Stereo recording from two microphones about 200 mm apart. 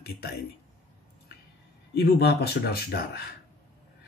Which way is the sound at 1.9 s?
50° left (ahead or behind).